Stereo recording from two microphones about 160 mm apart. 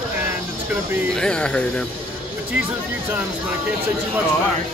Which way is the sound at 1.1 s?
5° left (ahead or behind).